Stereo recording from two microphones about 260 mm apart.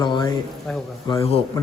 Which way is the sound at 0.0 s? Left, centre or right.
Centre.